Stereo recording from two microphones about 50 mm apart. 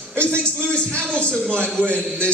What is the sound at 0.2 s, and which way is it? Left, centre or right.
A man's voice, left.